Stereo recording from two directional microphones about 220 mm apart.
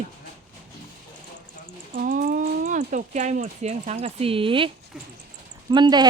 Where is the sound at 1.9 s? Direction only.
40° right (ahead or behind); by 4.7 s 25° right (ahead or behind).